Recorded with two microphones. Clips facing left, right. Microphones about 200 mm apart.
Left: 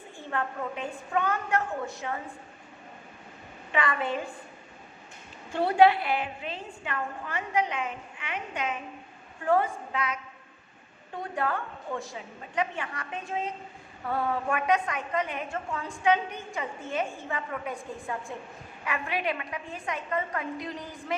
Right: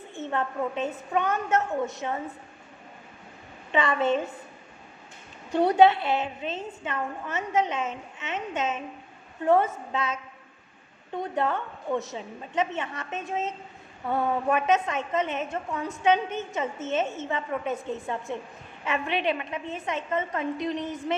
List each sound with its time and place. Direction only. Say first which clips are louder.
0.1 s a woman's voice: right 3 dB; 20° right (ahead or behind)
3.7 s a woman's voice: right 5 dB; 25° right (ahead or behind)
5.5 s a woman's voice: right 2 dB; 20° right (ahead or behind)
11.2 s a woman's voice: right 3 dB; 20° right (ahead or behind)